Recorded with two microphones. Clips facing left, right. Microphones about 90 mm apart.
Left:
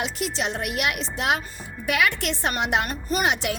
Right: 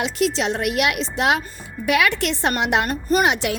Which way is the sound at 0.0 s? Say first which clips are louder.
Right 6 dB; 90° right.